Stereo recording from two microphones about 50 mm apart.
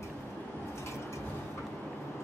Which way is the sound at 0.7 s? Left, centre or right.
Left.